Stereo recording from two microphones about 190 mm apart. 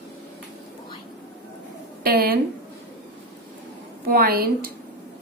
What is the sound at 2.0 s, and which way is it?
Speech, 50° right (ahead or behind).